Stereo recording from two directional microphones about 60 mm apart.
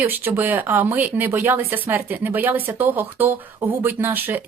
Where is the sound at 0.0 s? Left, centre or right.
Right.